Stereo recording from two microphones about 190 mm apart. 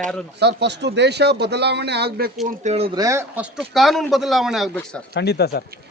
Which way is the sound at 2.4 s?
35° right (ahead or behind).